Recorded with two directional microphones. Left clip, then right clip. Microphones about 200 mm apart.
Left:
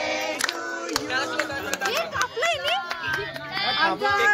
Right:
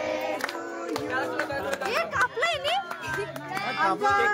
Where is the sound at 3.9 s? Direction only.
35° left (ahead or behind).